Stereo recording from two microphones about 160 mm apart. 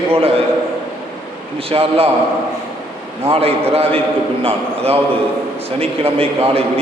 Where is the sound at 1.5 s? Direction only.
40° right (ahead or behind).